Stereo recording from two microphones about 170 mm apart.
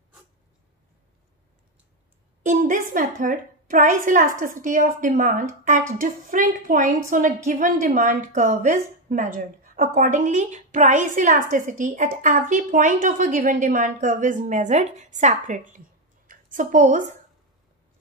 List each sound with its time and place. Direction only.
2.4 s a woman's voice: 50° right (ahead or behind)